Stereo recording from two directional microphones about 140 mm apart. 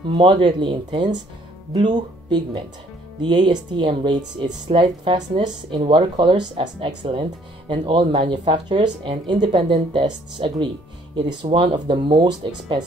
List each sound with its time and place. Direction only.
0.1 s speech: 35° right (ahead or behind)